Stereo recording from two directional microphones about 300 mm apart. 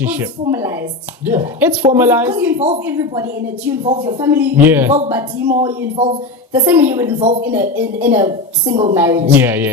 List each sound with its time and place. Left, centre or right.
0.0 s speech: centre
7.4 s speech: centre